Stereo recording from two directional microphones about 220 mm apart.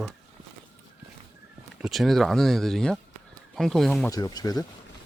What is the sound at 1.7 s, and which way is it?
Speech, centre (ahead or behind).